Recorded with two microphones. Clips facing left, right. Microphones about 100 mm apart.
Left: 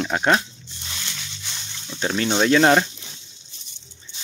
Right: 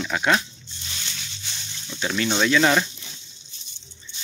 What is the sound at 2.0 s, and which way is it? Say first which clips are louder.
Speech: left 2 dB; 35° left (ahead or behind).